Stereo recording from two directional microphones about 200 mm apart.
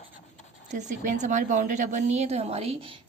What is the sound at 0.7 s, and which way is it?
A woman's voice, 35° right (ahead or behind).